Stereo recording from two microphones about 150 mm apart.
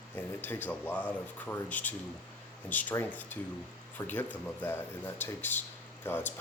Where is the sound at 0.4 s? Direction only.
10° left (ahead or behind).